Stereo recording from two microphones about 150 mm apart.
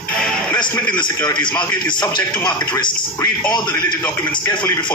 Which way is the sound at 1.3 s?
10° left (ahead or behind).